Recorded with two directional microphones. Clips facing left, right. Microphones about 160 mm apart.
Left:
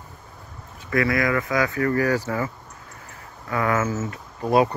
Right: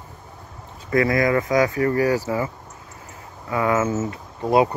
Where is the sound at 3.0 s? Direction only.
20° right (ahead or behind).